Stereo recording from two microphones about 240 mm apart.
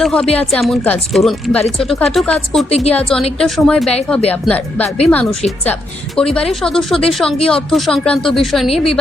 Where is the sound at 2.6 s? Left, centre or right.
Left.